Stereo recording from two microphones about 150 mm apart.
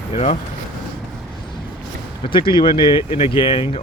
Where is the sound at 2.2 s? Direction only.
35° left (ahead or behind).